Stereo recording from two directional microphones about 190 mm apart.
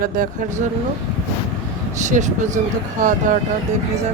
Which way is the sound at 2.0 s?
40° right (ahead or behind).